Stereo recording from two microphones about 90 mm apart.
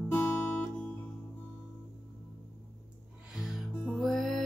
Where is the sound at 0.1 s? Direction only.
15° left (ahead or behind).